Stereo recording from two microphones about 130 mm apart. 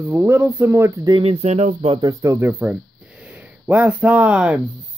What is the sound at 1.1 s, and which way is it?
Speech, 45° right (ahead or behind).